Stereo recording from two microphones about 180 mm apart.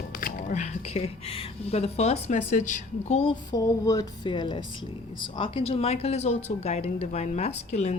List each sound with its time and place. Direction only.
0.2 s speech: 50° left (ahead or behind)
3.5 s a sound: 20° left (ahead or behind)
5.2 s speech: 30° left (ahead or behind)